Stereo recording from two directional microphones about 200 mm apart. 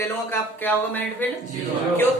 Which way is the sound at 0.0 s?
10° left (ahead or behind).